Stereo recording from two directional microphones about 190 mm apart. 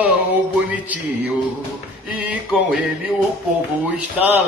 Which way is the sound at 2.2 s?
5° right (ahead or behind).